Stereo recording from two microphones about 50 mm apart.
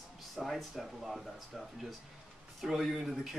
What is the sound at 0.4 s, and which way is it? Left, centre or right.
Speech, centre.